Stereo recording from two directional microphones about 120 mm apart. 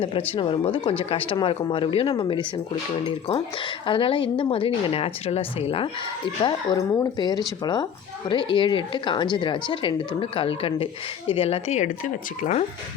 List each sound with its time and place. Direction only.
0.3 s a woman's voice: 50° left (ahead or behind)
6.7 s a woman's voice: 30° left (ahead or behind); by 12.6 s 80° left